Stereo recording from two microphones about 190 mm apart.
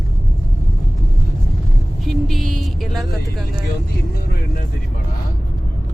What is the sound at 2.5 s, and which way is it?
Speech, centre (ahead or behind).